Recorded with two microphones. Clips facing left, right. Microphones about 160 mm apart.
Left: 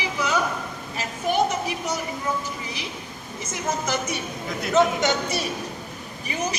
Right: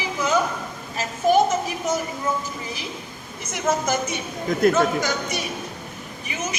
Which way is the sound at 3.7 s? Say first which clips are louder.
Right 5 dB; 90° right.